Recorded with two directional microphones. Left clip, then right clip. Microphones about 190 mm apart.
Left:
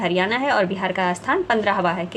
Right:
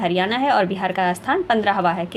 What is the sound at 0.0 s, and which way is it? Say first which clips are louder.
A woman's voice: right 1 dB; 10° right (ahead or behind).